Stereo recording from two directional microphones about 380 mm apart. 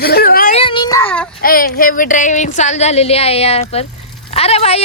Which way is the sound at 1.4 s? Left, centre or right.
Left.